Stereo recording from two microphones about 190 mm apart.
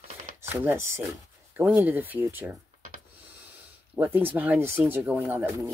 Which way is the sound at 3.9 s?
10° right (ahead or behind).